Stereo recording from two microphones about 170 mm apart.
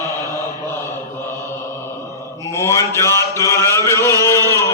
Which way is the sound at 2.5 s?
15° left (ahead or behind).